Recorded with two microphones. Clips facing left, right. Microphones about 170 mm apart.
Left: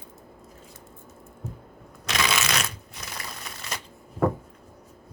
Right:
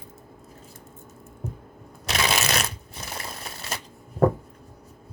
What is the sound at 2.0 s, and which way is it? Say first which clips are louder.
Shuffling cards: right 1 dB; 30° right (ahead or behind).